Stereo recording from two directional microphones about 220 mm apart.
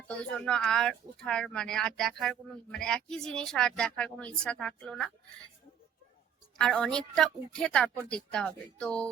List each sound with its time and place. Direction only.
0.1 s speech: 5° left (ahead or behind)
6.6 s speech: 5° left (ahead or behind)